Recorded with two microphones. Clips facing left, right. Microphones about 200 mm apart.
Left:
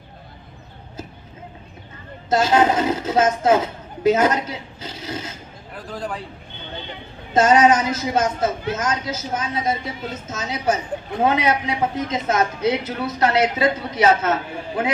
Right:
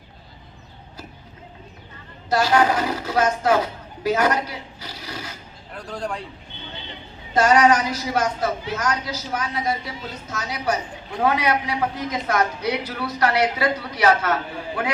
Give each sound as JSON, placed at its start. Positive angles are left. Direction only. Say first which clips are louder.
{"t": 2.3, "sound": "speech", "louder": "left 2 dB", "side_deg": 20}
{"t": 5.7, "sound": "speech", "louder": "even", "side_deg": 0}
{"t": 7.3, "sound": "a man's voice", "louder": "left 2 dB", "side_deg": 20}